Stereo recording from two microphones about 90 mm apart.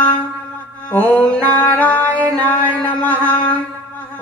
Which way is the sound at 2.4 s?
20° left (ahead or behind).